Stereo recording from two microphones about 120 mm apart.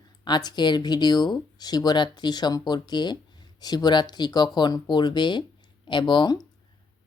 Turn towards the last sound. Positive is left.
turn(degrees=40)  # may be behind; listen again after turning